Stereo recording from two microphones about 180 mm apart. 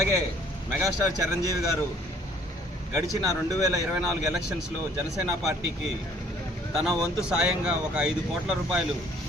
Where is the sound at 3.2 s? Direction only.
20° right (ahead or behind).